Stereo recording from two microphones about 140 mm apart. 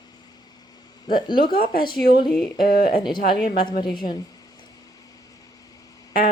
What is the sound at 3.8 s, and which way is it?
Speech, 35° left (ahead or behind).